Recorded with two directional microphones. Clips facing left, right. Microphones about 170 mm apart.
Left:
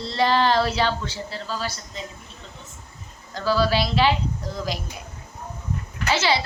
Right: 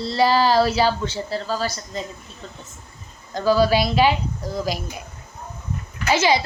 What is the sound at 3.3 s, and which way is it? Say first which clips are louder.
A woman's voice: right 4 dB; 15° right (ahead or behind).